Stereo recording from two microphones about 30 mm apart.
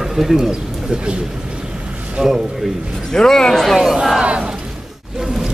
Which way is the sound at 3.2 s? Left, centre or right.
Centre.